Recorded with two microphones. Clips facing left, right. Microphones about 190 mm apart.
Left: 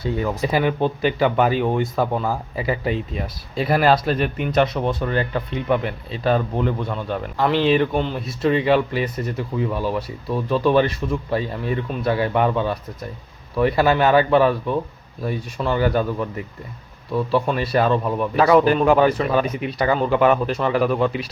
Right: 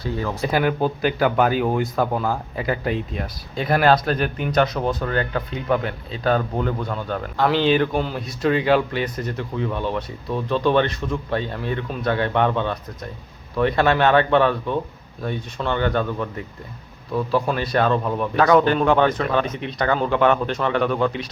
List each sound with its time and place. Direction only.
0.0 s speech: 20° left (ahead or behind)
0.4 s speech: centre (ahead or behind)